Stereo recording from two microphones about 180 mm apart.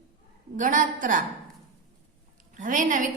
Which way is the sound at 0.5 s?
45° right (ahead or behind).